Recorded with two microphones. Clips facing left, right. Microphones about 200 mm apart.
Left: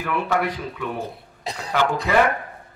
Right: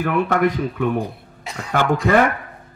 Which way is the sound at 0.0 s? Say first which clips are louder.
Right 5 dB; 45° right (ahead or behind).